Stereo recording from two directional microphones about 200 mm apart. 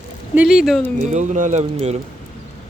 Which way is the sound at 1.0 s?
35° right (ahead or behind).